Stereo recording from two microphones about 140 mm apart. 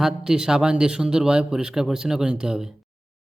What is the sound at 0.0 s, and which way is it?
Speech, 5° right (ahead or behind).